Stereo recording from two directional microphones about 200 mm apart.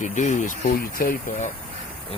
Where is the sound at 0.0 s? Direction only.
40° left (ahead or behind).